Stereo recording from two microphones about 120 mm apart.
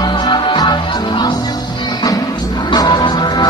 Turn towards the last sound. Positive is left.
turn(degrees=35)  # may be behind; listen again after turning